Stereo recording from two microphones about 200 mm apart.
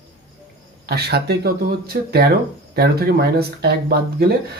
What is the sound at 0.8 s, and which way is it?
Speech, 55° right (ahead or behind).